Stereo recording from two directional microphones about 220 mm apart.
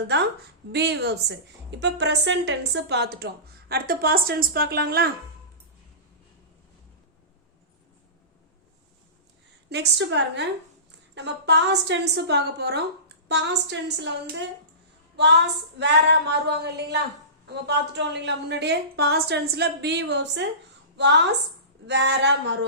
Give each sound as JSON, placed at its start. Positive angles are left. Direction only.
{"t": 0.7, "sound": "a woman's voice", "side_deg": -50}
{"t": 9.6, "sound": "a woman's voice", "side_deg": -50}
{"t": 15.1, "sound": "a sound", "side_deg": -50}
{"t": 15.8, "sound": "a woman's voice", "side_deg": -50}